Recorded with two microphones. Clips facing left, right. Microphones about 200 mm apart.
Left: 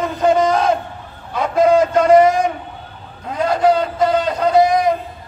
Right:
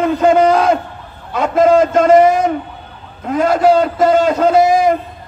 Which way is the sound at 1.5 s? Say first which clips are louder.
Right 2 dB; 50° right (ahead or behind).